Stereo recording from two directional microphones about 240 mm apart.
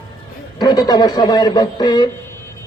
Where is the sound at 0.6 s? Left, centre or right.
Centre.